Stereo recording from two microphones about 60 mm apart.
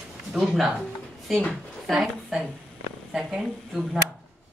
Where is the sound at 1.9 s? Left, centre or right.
Centre.